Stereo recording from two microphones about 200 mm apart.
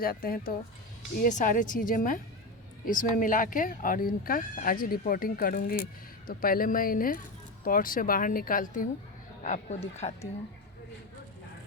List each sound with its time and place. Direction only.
0.0 s speech: 45° left (ahead or behind)